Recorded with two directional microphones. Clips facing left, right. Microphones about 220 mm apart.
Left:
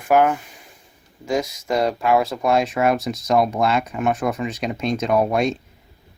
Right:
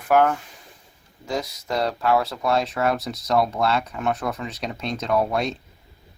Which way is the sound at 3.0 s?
45° left (ahead or behind).